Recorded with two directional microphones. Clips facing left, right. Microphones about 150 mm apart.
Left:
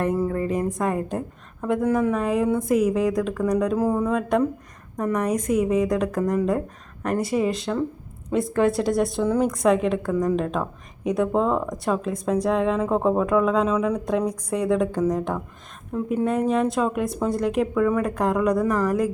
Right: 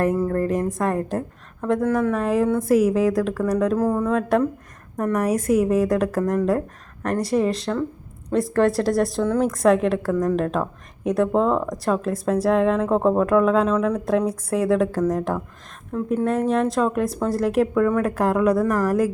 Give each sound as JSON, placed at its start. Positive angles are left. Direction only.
{"t": 0.0, "sound": "speech", "side_deg": 5}
{"t": 1.8, "sound": "speech", "side_deg": 15}
{"t": 2.1, "sound": "speech", "side_deg": 0}
{"t": 3.8, "sound": "speech", "side_deg": 10}
{"t": 14.0, "sound": "speech", "side_deg": -5}